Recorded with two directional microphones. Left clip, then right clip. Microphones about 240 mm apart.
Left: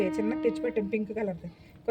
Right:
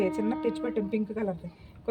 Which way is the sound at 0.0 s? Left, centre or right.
Centre.